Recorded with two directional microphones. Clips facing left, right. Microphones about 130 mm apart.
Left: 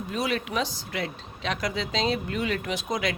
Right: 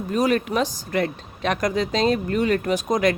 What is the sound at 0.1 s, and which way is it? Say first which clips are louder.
Speech: right 8 dB; 45° right (ahead or behind).